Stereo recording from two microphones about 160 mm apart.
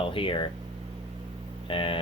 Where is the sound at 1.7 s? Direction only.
35° left (ahead or behind).